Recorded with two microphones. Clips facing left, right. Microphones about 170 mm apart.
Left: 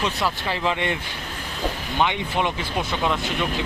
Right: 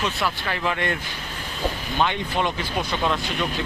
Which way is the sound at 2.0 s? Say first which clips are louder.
Left 1 dB; 15° left (ahead or behind).